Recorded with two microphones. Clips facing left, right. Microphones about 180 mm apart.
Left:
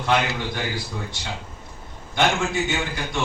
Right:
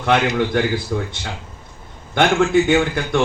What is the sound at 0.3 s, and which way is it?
Speech, 60° right (ahead or behind).